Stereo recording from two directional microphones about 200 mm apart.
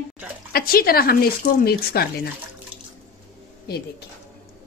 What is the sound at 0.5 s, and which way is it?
Speech, 45° left (ahead or behind).